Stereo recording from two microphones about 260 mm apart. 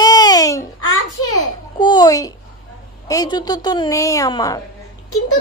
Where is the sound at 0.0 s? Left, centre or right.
Centre.